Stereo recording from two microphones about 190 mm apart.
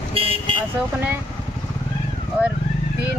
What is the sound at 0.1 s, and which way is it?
Vehicle, 30° right (ahead or behind).